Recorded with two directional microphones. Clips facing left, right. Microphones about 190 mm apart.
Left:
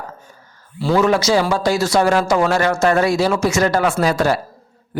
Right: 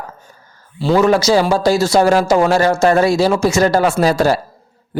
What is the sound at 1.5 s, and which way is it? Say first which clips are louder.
Speech: right 4 dB; 30° right (ahead or behind).